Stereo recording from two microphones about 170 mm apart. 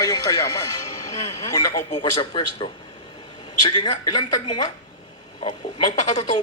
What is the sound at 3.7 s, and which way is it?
Speech, 25° left (ahead or behind).